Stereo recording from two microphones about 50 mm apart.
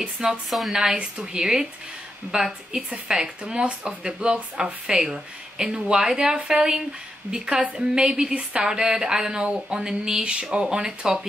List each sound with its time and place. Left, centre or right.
0.0 s speech: centre
0.5 s speech: centre
0.7 s speech: centre
6.6 s speech: centre